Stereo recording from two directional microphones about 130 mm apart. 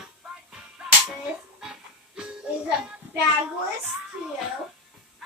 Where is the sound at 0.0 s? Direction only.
5° right (ahead or behind).